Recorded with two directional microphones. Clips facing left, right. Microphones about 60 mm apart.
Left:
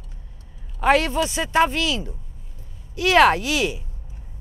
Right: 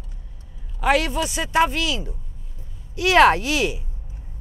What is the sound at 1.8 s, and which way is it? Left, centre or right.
Speech, right.